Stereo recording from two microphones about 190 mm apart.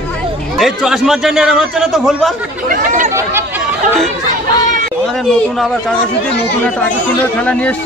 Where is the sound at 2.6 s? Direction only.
45° right (ahead or behind).